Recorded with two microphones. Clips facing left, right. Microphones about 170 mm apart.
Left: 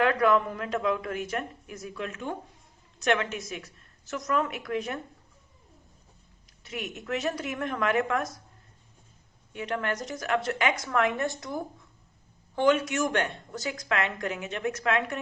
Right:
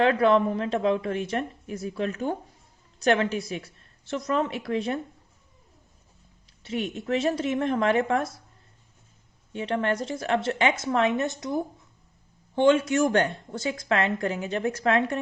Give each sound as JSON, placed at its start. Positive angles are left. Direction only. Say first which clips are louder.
{"t": 0.0, "sound": "a woman's voice", "louder": "right 3 dB", "side_deg": -30}
{"t": 6.6, "sound": "a woman's voice", "louder": "right 7 dB", "side_deg": -30}
{"t": 9.5, "sound": "a woman's voice", "louder": "right 5 dB", "side_deg": -30}